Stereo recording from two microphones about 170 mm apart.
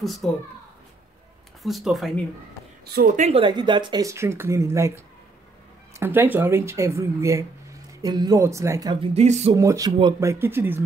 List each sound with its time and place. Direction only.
0.0 s speech: centre (ahead or behind)
1.6 s speech: centre (ahead or behind)
2.8 s speech: 70° right (ahead or behind)
3.2 s speech: 40° right (ahead or behind)
3.4 s speech: 30° right (ahead or behind)
9.0 s speech: 40° right (ahead or behind)
9.6 s speech: 20° right (ahead or behind)